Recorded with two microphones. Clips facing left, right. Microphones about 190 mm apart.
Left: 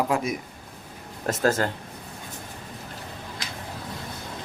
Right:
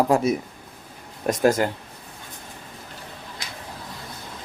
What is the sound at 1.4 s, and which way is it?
Speech, 15° right (ahead or behind).